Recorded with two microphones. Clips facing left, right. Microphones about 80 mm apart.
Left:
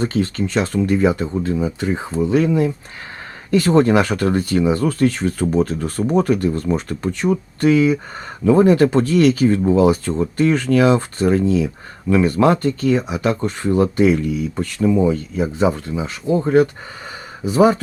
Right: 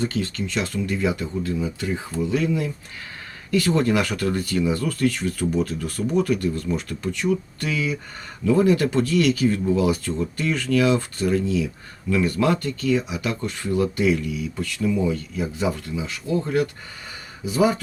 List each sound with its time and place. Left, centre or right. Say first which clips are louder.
0.0 s speech: left 6 dB; left